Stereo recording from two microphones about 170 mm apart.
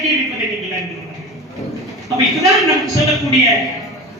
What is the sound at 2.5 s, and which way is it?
Speech, centre (ahead or behind).